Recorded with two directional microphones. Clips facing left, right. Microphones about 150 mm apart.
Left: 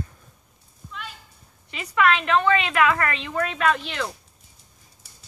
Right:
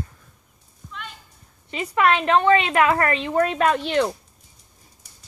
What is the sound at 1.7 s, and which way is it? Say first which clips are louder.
A woman's voice: right 2 dB; 30° right (ahead or behind).